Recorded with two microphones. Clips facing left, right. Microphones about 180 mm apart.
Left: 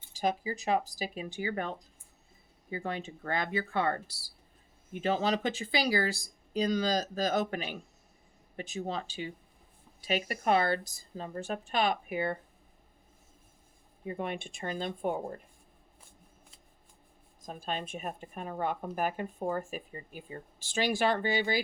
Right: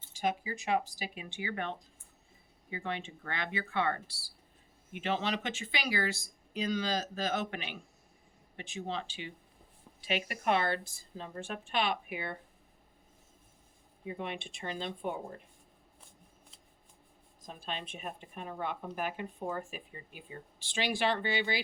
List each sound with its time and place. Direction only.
0.1 s speech: 35° left (ahead or behind)
14.0 s speech: 45° left (ahead or behind)
17.4 s speech: 45° left (ahead or behind)